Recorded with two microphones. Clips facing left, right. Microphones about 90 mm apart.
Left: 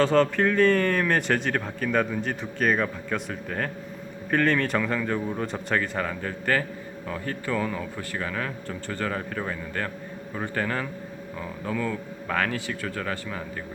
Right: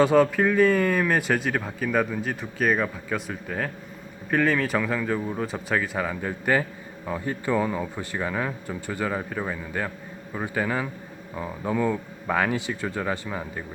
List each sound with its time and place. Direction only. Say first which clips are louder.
0.0 s a man's voice: right 2 dB; 10° right (ahead or behind)
11.3 s a man's voice: right 4 dB; 20° right (ahead or behind)